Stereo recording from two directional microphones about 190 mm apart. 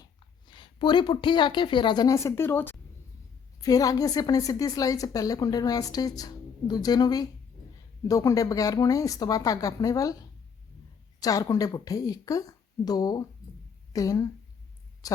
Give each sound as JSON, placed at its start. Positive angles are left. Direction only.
{"t": 0.0, "sound": "a woman's voice", "side_deg": 25}
{"t": 11.2, "sound": "a woman's voice", "side_deg": 20}